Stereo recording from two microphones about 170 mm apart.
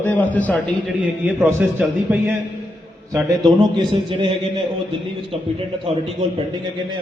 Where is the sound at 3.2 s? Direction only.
25° right (ahead or behind).